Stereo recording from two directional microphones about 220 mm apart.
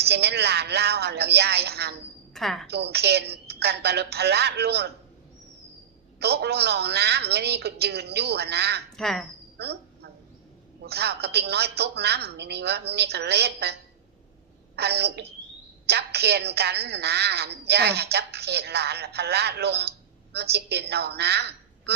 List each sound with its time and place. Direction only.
0.0 s a woman's voice: 50° right (ahead or behind)
2.3 s a woman's voice: centre (ahead or behind)
2.6 s a woman's voice: 50° right (ahead or behind)
6.1 s a woman's voice: 50° right (ahead or behind)
9.0 s speech: centre (ahead or behind)
9.6 s a sound: 50° right (ahead or behind)
10.8 s a woman's voice: 50° right (ahead or behind)
14.8 s a woman's voice: 50° right (ahead or behind)